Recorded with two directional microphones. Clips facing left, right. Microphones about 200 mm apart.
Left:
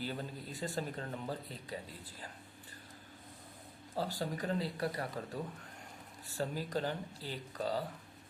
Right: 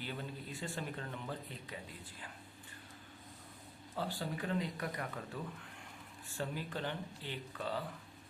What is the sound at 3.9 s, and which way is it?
Speech, 40° left (ahead or behind).